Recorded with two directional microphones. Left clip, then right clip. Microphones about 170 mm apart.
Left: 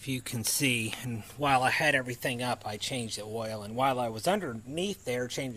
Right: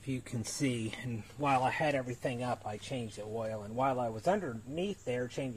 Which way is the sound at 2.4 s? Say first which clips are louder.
Left 4 dB; 20° left (ahead or behind).